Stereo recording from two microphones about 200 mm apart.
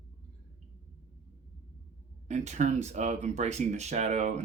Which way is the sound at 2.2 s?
35° right (ahead or behind).